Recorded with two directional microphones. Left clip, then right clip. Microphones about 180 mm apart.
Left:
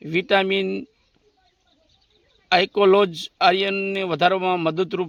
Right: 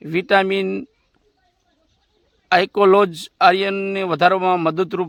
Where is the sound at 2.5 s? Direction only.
20° right (ahead or behind).